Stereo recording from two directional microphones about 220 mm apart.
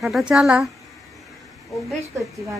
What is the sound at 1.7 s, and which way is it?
Speech, centre (ahead or behind).